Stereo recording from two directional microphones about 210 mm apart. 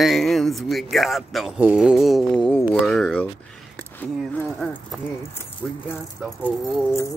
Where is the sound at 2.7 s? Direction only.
5° left (ahead or behind).